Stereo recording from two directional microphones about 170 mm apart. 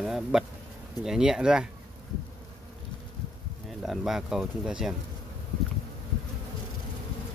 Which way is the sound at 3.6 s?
Centre (ahead or behind).